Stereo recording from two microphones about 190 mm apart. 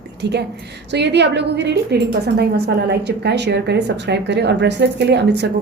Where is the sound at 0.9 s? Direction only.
65° right (ahead or behind).